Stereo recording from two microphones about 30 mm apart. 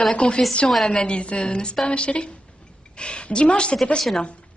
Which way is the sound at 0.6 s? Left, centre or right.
Left.